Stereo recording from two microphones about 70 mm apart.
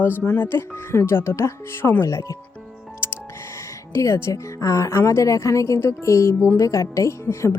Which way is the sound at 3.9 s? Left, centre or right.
Left.